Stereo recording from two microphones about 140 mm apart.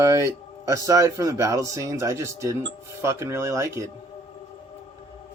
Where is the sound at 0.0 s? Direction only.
20° right (ahead or behind).